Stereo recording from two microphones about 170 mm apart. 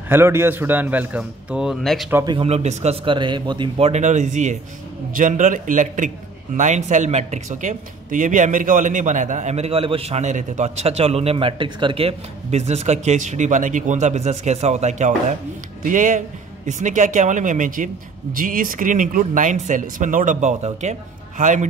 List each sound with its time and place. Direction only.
0.1 s a man's voice: 15° right (ahead or behind)
2.2 s a man's voice: 35° right (ahead or behind)